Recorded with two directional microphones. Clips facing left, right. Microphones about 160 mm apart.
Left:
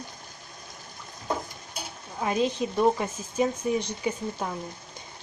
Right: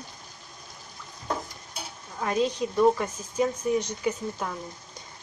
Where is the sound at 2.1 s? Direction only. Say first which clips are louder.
Even; 20° left (ahead or behind).